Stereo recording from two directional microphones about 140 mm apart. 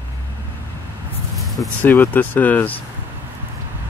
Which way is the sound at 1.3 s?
Centre (ahead or behind).